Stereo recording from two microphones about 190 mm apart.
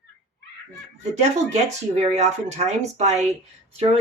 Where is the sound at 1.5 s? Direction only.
35° right (ahead or behind).